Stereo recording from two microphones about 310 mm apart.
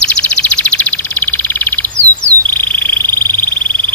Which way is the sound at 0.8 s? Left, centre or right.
Centre.